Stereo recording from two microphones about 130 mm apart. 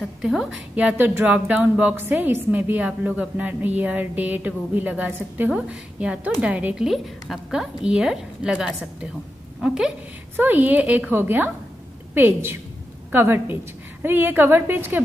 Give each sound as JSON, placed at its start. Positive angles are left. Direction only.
{"t": 0.2, "sound": "a woman's voice", "side_deg": -5}